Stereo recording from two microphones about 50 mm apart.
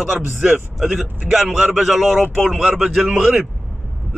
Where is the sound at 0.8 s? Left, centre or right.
Right.